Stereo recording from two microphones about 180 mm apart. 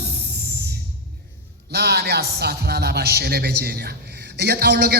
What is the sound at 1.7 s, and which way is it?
A man's voice, 65° right (ahead or behind).